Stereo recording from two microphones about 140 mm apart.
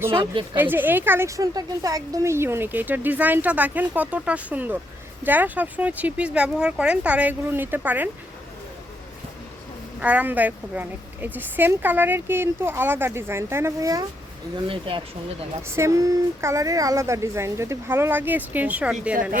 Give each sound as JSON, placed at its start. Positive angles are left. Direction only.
{"t": 0.5, "sound": "a woman's voice", "side_deg": -15}
{"t": 10.0, "sound": "a woman's voice", "side_deg": -10}
{"t": 14.5, "sound": "speech", "side_deg": -35}
{"t": 15.6, "sound": "speech", "side_deg": -20}